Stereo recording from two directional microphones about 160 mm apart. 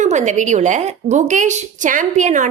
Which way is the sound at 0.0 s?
50° right (ahead or behind).